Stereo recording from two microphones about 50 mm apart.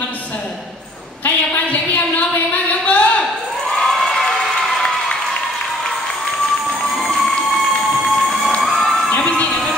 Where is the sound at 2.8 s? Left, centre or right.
Left.